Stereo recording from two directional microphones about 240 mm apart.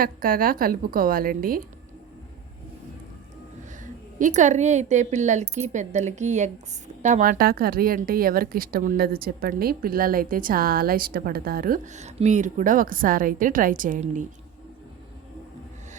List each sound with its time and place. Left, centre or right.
0.0 s speech: right
4.2 s speech: right